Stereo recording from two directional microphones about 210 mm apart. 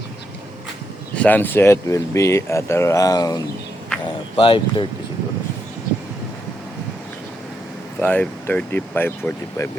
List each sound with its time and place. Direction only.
1.1 s speech: 5° left (ahead or behind); by 4.9 s 25° left (ahead or behind)
8.0 s speech: 5° left (ahead or behind)